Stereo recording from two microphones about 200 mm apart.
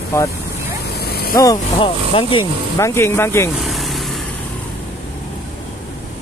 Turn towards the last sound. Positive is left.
turn(degrees=0)  # may be behind; listen again after turning